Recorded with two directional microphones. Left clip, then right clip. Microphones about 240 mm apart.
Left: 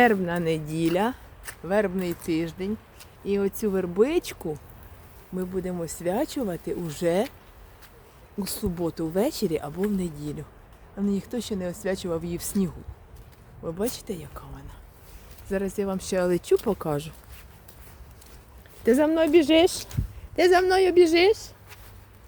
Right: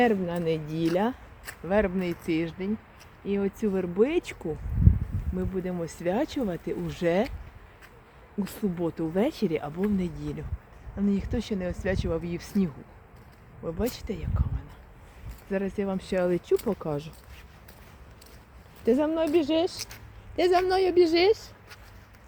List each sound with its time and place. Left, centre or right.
0.0 s speech: centre
8.4 s speech: centre
15.4 s speech: centre
18.9 s speech: left
20.3 s speech: centre